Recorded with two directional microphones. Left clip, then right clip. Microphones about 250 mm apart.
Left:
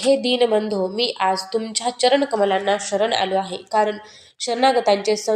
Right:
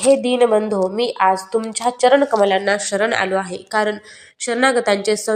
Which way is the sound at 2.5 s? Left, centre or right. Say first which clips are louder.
Right 2 dB; right.